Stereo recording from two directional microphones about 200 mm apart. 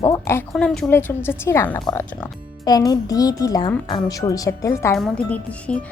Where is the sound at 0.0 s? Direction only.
15° left (ahead or behind).